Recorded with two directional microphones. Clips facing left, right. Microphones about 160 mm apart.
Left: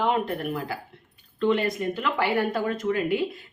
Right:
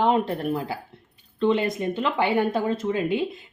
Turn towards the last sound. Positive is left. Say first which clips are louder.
# right 1 dB
turn(degrees=-25)  # may be behind; listen again after turning